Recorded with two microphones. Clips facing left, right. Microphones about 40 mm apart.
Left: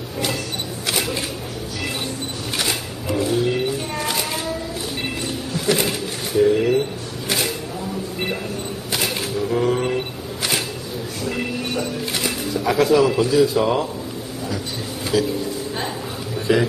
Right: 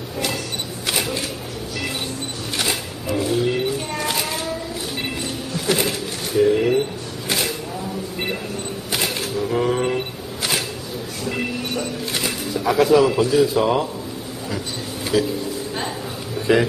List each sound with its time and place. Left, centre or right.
0.8 s single-lens reflex camera: centre
2.5 s a sound: centre
5.7 s a sound: centre
8.9 s single-lens reflex camera: centre
12.5 s a man's voice: centre
15.1 s speech: centre
16.5 s speech: centre